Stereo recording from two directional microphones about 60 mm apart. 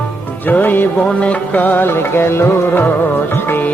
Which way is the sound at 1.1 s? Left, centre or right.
Centre.